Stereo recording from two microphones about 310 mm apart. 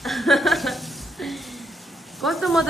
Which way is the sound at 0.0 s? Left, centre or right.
Centre.